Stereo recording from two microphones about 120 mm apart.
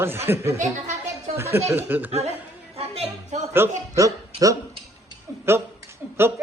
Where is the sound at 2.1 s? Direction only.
60° right (ahead or behind).